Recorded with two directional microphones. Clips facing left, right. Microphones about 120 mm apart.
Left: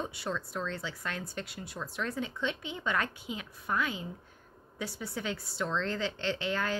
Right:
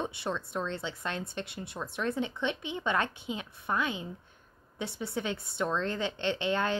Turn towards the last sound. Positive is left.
turn(degrees=-25)  # may be behind; listen again after turning